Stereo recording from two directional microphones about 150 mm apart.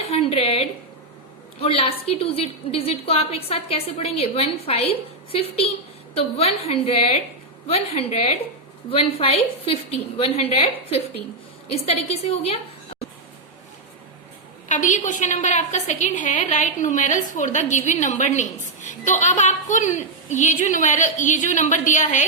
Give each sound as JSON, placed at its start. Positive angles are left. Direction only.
{"t": 0.0, "sound": "a sound", "side_deg": 40}
{"t": 1.6, "sound": "a woman's voice", "side_deg": 40}
{"t": 14.7, "sound": "a woman's voice", "side_deg": 55}